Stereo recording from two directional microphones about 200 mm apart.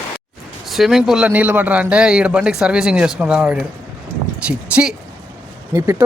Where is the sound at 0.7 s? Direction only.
Centre (ahead or behind).